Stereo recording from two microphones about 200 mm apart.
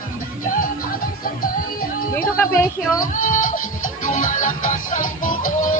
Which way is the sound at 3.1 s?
40° left (ahead or behind).